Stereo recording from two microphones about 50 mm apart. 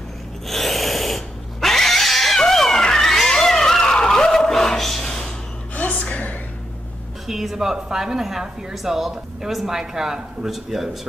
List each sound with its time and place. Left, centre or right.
0.5 s cat: centre
5.8 s a sound: left
7.2 s speech: centre